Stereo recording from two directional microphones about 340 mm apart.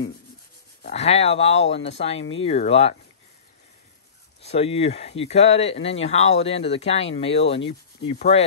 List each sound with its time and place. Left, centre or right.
0.8 s speech: centre
4.4 s speech: centre